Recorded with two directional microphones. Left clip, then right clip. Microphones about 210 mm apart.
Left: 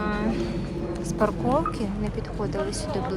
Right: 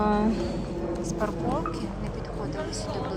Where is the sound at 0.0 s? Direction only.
20° right (ahead or behind).